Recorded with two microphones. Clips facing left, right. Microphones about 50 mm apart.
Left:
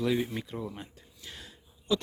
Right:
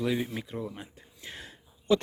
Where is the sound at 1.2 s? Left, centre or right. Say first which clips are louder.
Right 3 dB; right.